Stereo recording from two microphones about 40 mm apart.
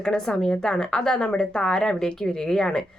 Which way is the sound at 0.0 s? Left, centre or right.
Centre.